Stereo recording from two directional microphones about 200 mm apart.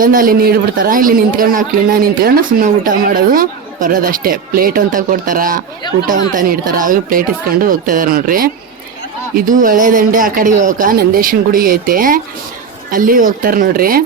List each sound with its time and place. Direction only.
0.0 s speech: 45° right (ahead or behind)